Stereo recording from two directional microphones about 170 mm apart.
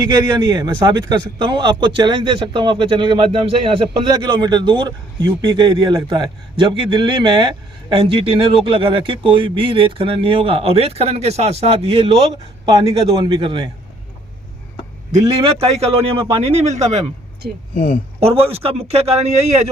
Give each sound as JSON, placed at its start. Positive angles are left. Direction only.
{"t": 0.1, "sound": "a man's voice", "side_deg": -25}
{"t": 15.5, "sound": "a man's voice", "side_deg": -35}
{"t": 18.2, "sound": "a man's voice", "side_deg": -35}